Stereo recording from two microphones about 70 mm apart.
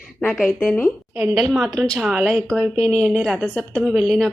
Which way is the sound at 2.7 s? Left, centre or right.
Centre.